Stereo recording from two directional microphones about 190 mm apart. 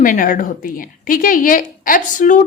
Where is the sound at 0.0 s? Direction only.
45° left (ahead or behind).